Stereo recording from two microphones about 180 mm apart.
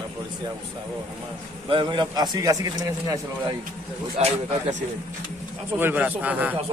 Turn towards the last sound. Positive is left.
turn(degrees=-10)  # may be behind; listen again after turning